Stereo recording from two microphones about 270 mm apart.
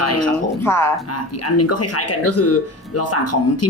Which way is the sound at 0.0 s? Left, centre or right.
Left.